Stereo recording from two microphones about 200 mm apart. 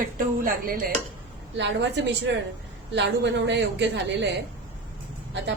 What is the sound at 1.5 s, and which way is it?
Speech, 65° right (ahead or behind).